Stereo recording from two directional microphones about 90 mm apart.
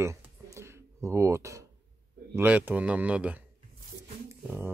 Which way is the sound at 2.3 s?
20° right (ahead or behind).